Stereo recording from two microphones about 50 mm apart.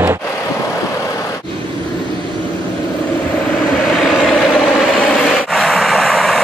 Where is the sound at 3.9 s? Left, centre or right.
Centre.